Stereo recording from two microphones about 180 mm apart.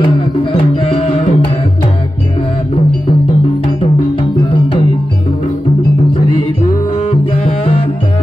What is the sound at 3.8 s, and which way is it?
Music, 30° left (ahead or behind).